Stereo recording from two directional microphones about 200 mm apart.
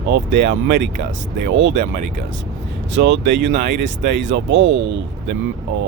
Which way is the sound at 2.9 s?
60° right (ahead or behind).